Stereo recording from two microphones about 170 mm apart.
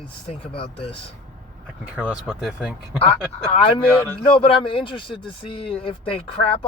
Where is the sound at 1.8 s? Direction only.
10° right (ahead or behind).